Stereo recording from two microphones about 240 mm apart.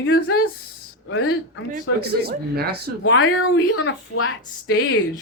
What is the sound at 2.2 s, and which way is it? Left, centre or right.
Speech, right.